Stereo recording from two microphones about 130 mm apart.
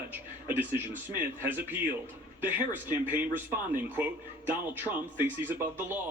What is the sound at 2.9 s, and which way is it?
Speech, 15° right (ahead or behind).